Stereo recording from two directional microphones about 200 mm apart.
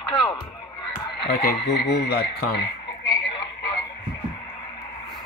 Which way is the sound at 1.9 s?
50° left (ahead or behind).